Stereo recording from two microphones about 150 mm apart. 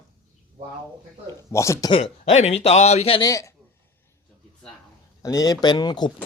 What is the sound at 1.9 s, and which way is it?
A man's voice, 45° left (ahead or behind).